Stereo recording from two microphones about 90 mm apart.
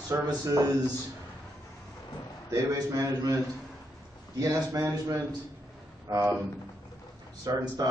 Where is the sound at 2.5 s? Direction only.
40° right (ahead or behind).